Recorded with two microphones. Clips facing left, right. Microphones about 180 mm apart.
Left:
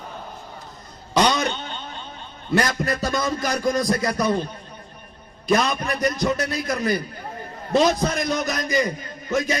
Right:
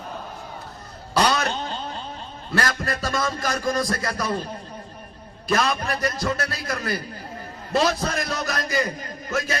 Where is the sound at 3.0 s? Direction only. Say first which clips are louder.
Left 2 dB; centre (ahead or behind).